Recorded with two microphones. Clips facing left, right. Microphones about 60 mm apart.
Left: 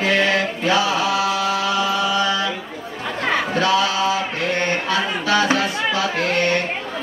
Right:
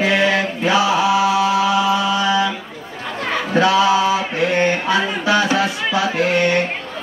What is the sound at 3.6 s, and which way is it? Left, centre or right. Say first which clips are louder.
Mantra: right 7 dB; centre.